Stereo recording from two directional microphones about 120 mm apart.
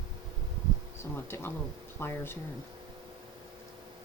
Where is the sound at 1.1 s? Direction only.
20° left (ahead or behind).